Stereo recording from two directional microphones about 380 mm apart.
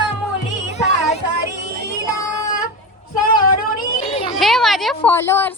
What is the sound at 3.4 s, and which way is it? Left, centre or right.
Music, left.